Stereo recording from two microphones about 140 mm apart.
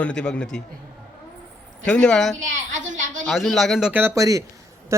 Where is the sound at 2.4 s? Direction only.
60° right (ahead or behind).